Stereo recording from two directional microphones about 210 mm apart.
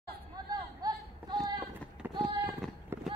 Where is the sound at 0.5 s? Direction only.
20° right (ahead or behind).